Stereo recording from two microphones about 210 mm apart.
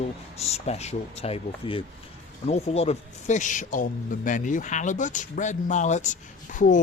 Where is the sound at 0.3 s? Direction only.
30° left (ahead or behind).